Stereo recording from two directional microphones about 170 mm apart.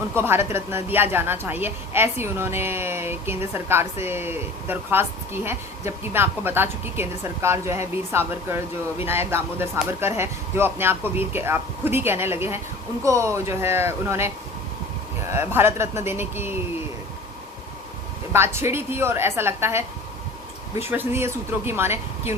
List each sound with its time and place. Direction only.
0.1 s a woman's voice: 15° right (ahead or behind)
15.3 s a woman's voice: 15° right (ahead or behind)
18.3 s a woman's voice: 15° right (ahead or behind)